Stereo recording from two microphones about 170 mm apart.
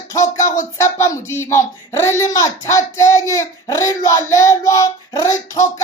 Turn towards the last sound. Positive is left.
turn(degrees=20)  # may be behind; listen again after turning